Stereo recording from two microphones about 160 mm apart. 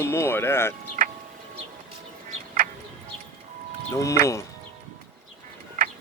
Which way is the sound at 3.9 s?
20° left (ahead or behind).